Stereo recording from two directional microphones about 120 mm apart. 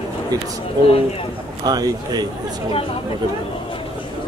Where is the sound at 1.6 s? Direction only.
35° right (ahead or behind).